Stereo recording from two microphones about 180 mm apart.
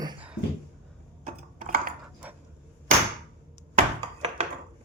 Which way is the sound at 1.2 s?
45° right (ahead or behind).